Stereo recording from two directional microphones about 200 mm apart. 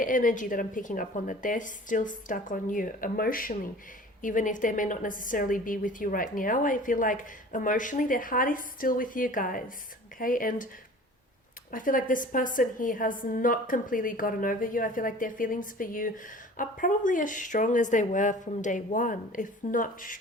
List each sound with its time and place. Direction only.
0.0 s a woman's voice: 40° left (ahead or behind)
11.7 s a woman's voice: 40° left (ahead or behind)